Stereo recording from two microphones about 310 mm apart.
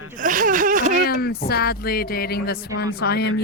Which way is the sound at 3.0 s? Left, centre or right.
Left.